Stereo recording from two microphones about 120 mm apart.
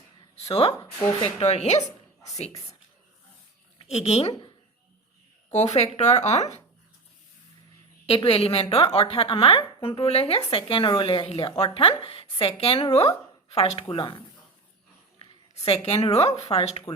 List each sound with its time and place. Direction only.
0.3 s a woman's voice: 60° left (ahead or behind)
3.8 s a woman's voice: 60° left (ahead or behind)
5.5 s speech: 70° left (ahead or behind)
8.0 s a woman's voice: 50° left (ahead or behind)
13.9 s a woman's voice: 45° left (ahead or behind)
15.2 s a sound: 50° left (ahead or behind)
16.1 s speech: 60° left (ahead or behind)